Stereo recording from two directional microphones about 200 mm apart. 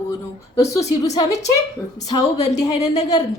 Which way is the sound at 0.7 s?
15° left (ahead or behind).